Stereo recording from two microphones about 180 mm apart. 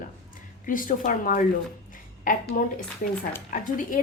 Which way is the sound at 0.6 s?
50° left (ahead or behind).